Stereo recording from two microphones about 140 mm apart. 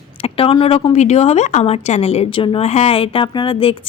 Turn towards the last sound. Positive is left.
turn(degrees=40)  # may be behind; listen again after turning